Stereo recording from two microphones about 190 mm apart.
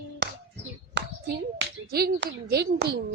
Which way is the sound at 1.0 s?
65° right (ahead or behind).